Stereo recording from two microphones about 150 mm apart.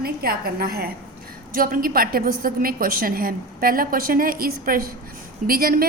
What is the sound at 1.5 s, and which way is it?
A woman's voice, 70° right (ahead or behind).